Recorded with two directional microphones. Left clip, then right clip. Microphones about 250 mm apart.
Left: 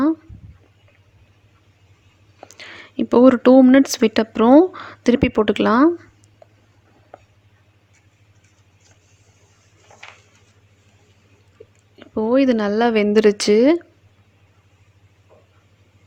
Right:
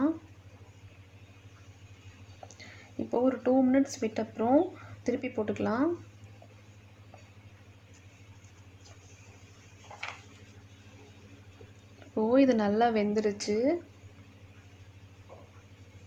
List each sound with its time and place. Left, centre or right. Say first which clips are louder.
2.6 s speech: left 14 dB; left
11.9 s speech: left 8 dB; left